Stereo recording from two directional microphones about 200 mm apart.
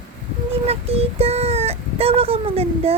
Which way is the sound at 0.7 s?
30° right (ahead or behind).